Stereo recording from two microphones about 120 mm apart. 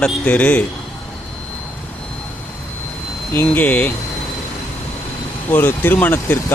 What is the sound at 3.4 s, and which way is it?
Speech, 15° left (ahead or behind).